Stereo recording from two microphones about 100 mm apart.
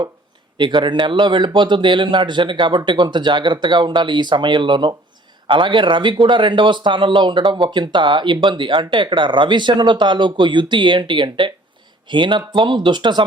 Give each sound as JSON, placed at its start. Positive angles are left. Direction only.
{"t": 0.5, "sound": "speech", "side_deg": -50}